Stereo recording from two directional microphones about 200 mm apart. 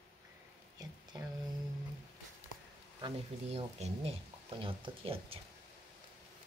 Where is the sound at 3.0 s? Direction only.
25° right (ahead or behind).